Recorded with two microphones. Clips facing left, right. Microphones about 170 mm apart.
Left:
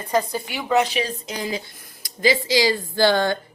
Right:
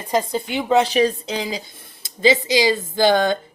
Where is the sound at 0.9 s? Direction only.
35° right (ahead or behind).